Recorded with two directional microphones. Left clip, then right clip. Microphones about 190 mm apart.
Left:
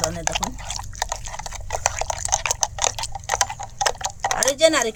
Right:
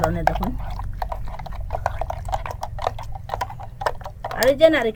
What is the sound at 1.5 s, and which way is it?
Sewing machine, 60° left (ahead or behind).